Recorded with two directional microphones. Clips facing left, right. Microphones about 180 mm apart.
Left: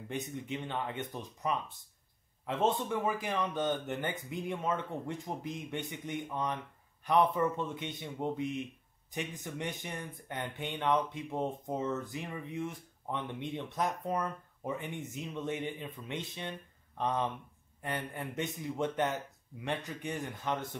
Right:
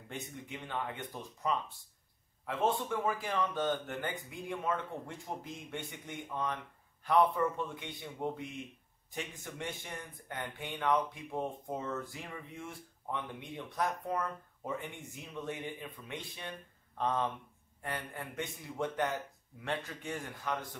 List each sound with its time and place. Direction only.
0.1 s speech: 20° left (ahead or behind)